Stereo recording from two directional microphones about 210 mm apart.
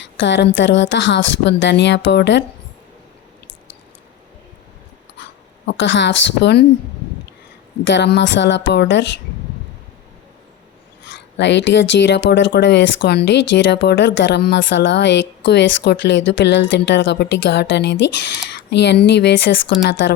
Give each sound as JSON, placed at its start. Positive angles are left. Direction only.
{"t": 0.0, "sound": "speech", "side_deg": 60}
{"t": 5.6, "sound": "speech", "side_deg": 60}
{"t": 7.9, "sound": "speech", "side_deg": 55}
{"t": 11.0, "sound": "speech", "side_deg": 55}